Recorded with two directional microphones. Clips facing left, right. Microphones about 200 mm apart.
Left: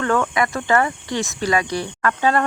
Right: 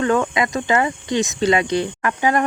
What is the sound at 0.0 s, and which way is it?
Speech, 20° right (ahead or behind).